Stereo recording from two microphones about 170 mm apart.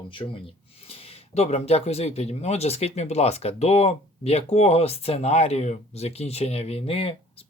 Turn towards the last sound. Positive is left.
turn(degrees=35)  # may be behind; listen again after turning